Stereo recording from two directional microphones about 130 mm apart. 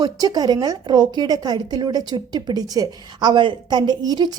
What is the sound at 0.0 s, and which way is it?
A woman's voice, 30° right (ahead or behind).